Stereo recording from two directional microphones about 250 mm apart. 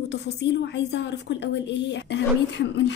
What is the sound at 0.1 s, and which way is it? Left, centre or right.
Speech, left.